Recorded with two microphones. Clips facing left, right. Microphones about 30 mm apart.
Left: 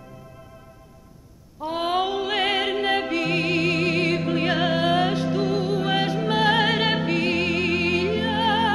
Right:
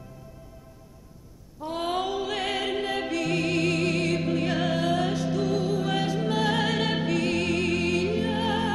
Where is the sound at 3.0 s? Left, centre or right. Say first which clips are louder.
Left 3 dB; left.